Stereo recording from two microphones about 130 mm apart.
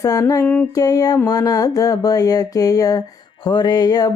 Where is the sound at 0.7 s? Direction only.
25° left (ahead or behind).